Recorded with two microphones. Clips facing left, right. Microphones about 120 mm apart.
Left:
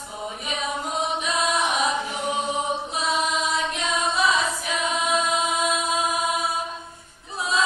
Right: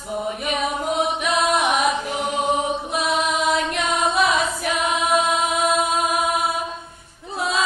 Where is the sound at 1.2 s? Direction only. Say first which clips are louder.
Right 5 dB; 60° right (ahead or behind).